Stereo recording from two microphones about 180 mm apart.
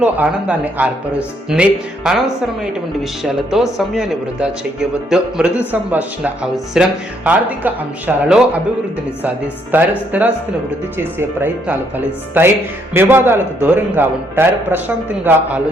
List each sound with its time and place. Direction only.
0.0 s a man's voice: 10° right (ahead or behind)
2.0 s a woman's voice: centre (ahead or behind)
9.7 s a man's voice: 10° right (ahead or behind)